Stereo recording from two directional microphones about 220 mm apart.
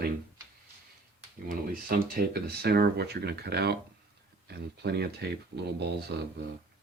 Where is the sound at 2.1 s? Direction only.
45° right (ahead or behind).